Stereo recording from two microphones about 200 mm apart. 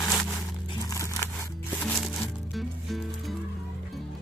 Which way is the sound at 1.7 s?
10° left (ahead or behind).